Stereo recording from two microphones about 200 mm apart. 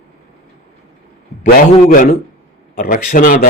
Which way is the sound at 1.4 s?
45° left (ahead or behind).